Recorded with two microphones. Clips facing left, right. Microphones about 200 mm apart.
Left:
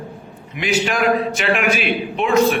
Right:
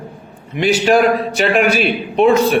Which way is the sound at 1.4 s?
35° right (ahead or behind).